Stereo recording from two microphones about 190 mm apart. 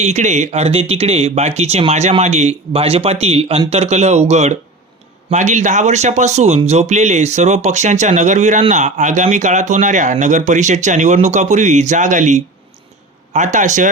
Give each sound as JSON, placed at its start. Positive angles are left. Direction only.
{"t": 0.0, "sound": "speech", "side_deg": -40}